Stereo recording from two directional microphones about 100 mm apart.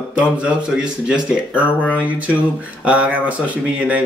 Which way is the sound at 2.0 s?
15° right (ahead or behind).